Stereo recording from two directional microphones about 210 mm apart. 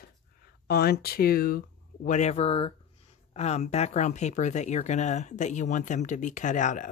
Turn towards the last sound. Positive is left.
turn(degrees=35)  # may be behind; listen again after turning